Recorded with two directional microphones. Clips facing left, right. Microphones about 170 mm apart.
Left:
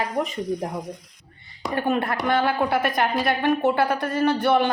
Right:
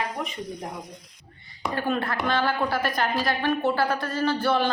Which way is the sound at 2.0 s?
20° left (ahead or behind).